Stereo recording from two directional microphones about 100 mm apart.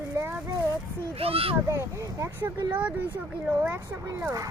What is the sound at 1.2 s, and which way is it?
Speech, 75° right (ahead or behind).